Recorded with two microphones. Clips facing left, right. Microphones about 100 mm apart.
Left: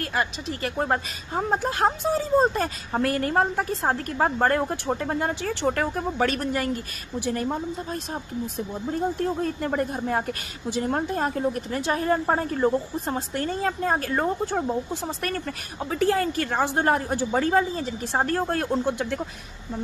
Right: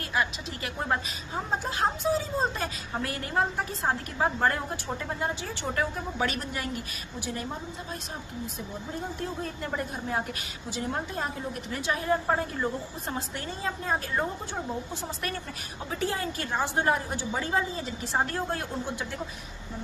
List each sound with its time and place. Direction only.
0.1 s a woman's voice: 45° left (ahead or behind)
4.8 s a woman's voice: 65° left (ahead or behind); by 6.8 s 50° left (ahead or behind)
9.4 s a woman's voice: 45° left (ahead or behind)
13.4 s a woman's voice: 55° left (ahead or behind)
15.9 s a woman's voice: 60° left (ahead or behind)